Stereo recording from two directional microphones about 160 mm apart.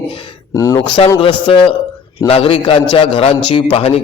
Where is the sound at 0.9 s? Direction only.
35° left (ahead or behind).